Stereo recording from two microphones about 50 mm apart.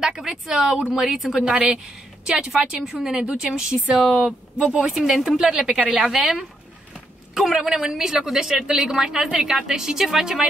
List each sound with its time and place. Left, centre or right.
0.0 s a woman's voice: centre
3.7 s speech: right
4.9 s a woman's voice: centre
7.3 s a woman's voice: centre